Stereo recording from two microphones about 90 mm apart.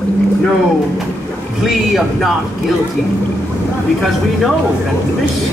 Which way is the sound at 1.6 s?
Centre (ahead or behind).